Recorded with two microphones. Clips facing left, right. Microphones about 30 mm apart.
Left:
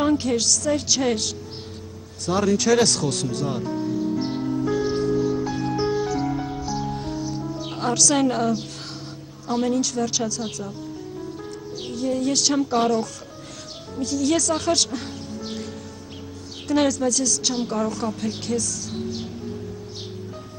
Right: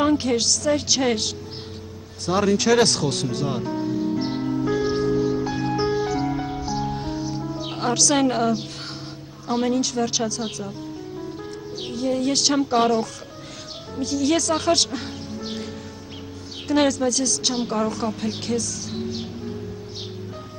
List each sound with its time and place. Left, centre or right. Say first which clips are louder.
0.0 s a woman's voice: right 1 dB; centre
2.2 s music: right 1 dB; centre
9.5 s a woman's voice: even; centre
11.8 s a woman's voice: right 1 dB; centre